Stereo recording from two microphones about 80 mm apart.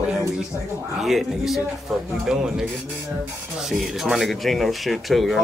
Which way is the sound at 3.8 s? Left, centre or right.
Centre.